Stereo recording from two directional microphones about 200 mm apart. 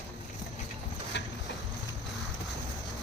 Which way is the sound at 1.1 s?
60° left (ahead or behind).